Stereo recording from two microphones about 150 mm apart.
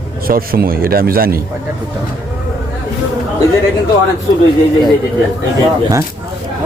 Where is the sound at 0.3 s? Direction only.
80° right.